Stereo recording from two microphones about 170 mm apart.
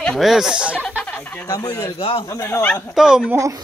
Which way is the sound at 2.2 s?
15° left (ahead or behind).